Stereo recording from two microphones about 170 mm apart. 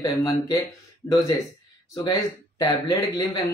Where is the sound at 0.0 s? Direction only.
20° left (ahead or behind).